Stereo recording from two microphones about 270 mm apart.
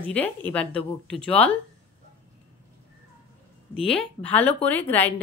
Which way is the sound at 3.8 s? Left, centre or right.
Centre.